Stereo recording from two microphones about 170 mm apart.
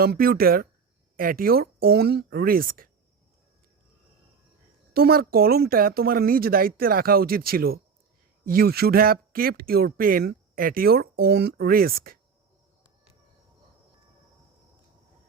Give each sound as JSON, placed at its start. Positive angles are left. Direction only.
{"t": 0.0, "sound": "speech", "side_deg": -60}
{"t": 4.9, "sound": "speech", "side_deg": -65}